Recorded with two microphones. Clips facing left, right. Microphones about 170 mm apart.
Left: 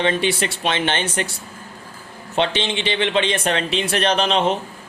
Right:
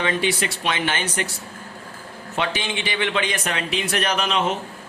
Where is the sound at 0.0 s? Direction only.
30° left (ahead or behind).